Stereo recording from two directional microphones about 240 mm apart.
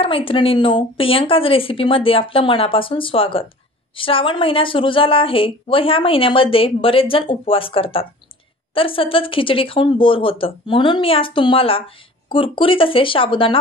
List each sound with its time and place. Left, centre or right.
0.0 s a woman's voice: left